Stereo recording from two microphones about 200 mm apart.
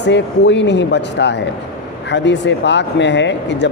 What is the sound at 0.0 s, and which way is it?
Speech, 60° left (ahead or behind).